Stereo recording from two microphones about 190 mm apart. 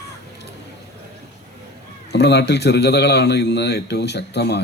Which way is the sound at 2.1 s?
65° left (ahead or behind).